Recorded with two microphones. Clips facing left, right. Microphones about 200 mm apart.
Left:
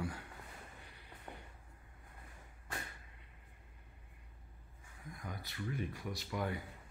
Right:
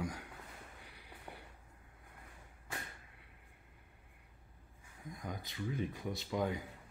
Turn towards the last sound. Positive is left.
turn(degrees=-20)  # may be behind; listen again after turning